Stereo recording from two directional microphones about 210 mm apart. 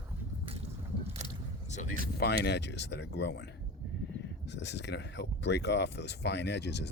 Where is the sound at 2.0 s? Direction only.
50° left (ahead or behind).